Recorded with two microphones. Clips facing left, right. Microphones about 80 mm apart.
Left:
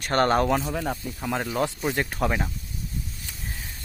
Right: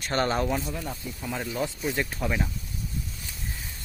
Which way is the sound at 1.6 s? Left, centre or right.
Left.